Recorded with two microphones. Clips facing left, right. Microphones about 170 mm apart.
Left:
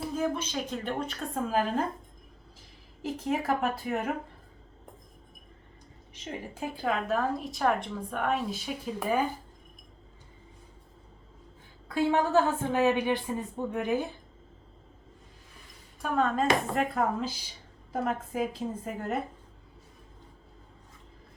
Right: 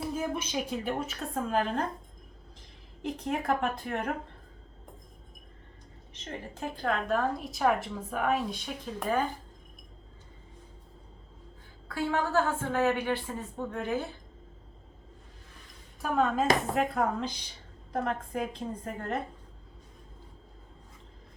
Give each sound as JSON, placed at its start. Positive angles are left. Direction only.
{"t": 0.0, "sound": "a woman's voice", "side_deg": -10}
{"t": 3.0, "sound": "a woman's voice", "side_deg": 0}
{"t": 6.2, "sound": "a woman's voice", "side_deg": 10}
{"t": 11.9, "sound": "a woman's voice", "side_deg": 20}
{"t": 16.0, "sound": "a woman's voice", "side_deg": 0}